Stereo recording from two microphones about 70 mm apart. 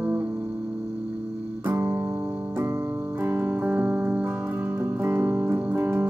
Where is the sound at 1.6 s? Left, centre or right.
Right.